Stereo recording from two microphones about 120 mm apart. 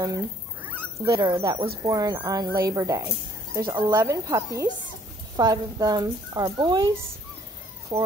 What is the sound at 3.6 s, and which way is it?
Speech, 40° right (ahead or behind).